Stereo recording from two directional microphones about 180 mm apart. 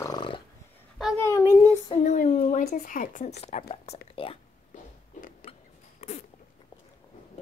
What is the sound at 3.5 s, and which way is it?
Speech, 40° left (ahead or behind).